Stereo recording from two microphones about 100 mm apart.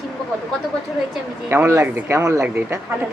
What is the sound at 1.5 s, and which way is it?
Speech, 25° right (ahead or behind).